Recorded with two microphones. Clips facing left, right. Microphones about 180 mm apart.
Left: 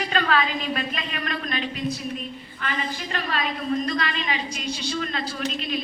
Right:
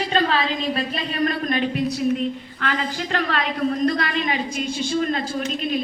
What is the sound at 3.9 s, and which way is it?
A woman's voice, 50° right (ahead or behind).